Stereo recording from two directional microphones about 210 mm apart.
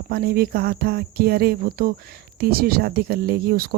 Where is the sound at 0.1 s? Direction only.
45° right (ahead or behind).